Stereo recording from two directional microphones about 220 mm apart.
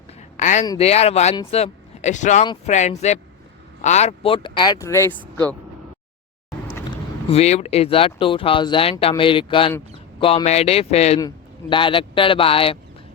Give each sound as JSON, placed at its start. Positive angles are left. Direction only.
{"t": 0.1, "sound": "a sound", "side_deg": 30}
{"t": 0.8, "sound": "speech", "side_deg": 30}
{"t": 6.7, "sound": "speech", "side_deg": 25}